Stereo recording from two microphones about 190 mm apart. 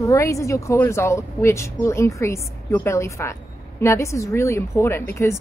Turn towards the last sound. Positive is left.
turn(degrees=15)  # may be behind; listen again after turning